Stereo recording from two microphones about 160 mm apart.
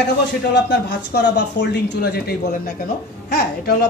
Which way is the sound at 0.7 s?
90° left.